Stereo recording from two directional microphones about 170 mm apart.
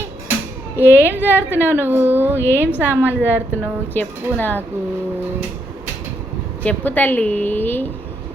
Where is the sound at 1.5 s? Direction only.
15° right (ahead or behind).